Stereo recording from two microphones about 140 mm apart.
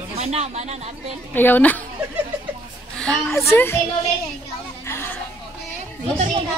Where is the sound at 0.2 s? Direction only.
50° right (ahead or behind).